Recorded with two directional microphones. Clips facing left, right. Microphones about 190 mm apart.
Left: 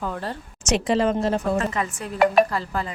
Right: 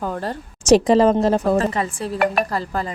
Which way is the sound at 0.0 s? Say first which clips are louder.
Right 4 dB; 40° right (ahead or behind).